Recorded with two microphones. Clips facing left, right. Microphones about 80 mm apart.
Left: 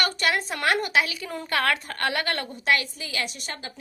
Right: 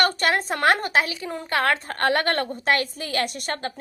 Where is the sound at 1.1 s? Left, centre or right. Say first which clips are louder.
Right 2 dB; right.